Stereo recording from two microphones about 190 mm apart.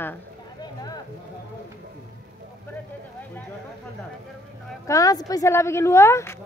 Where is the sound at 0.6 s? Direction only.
20° left (ahead or behind).